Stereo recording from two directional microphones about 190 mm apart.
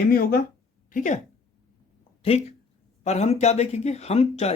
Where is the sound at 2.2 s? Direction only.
30° left (ahead or behind).